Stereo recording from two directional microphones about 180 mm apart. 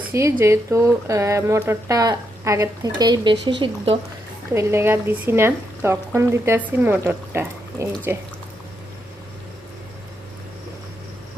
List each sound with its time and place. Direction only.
0.1 s speech: 15° right (ahead or behind)
4.5 s speech: 15° right (ahead or behind)